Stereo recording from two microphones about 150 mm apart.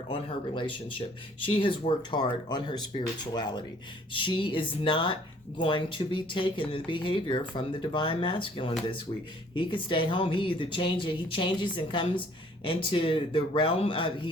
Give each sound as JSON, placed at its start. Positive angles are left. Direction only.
{"t": 0.1, "sound": "speech", "side_deg": 35}